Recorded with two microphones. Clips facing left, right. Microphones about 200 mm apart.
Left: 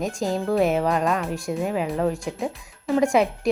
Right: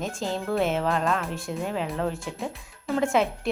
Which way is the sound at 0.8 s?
15° left (ahead or behind).